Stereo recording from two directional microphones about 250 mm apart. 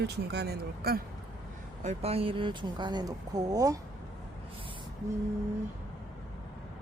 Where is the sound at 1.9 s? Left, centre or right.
Right.